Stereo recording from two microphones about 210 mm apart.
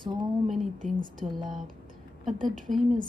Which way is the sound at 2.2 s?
Centre (ahead or behind).